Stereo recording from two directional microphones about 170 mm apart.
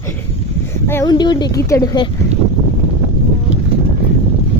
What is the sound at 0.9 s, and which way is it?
Speech, 20° left (ahead or behind).